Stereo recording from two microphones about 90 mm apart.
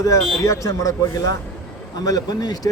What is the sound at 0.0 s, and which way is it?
A man's voice, 35° left (ahead or behind).